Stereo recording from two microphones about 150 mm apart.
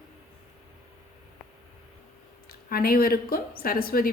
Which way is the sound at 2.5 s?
85° left.